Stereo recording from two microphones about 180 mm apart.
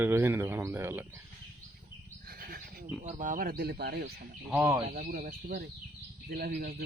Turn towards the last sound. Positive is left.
turn(degrees=-55)  # may be behind; listen again after turning